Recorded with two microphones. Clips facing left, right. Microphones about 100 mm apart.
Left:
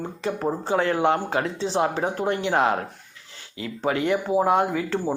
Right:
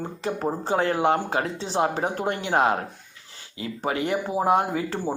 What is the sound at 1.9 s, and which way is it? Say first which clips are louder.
Speech: left 1 dB; 45° right (ahead or behind).